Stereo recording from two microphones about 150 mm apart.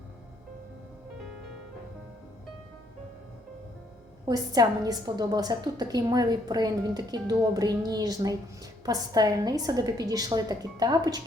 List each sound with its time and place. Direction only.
4.3 s a woman's voice: 25° right (ahead or behind)